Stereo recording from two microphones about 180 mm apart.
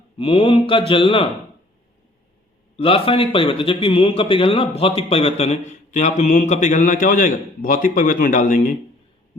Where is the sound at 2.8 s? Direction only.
30° left (ahead or behind); by 8.7 s 50° left (ahead or behind).